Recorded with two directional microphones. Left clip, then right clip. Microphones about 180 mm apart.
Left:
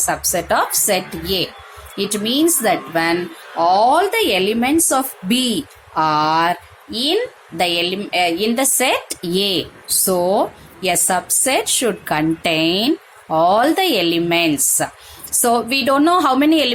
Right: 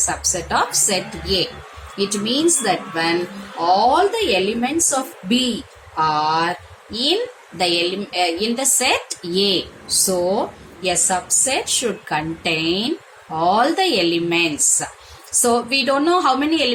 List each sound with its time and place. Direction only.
0.1 s a woman's voice: 45° left (ahead or behind)